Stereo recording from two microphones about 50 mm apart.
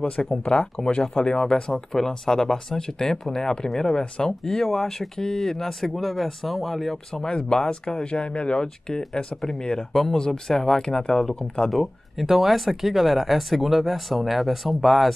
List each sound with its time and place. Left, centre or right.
0.0 s speech: centre
7.2 s speech: centre
11.7 s speech: centre